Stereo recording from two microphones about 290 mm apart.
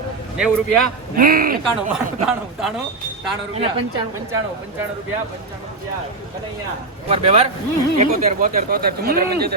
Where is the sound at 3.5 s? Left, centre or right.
Centre.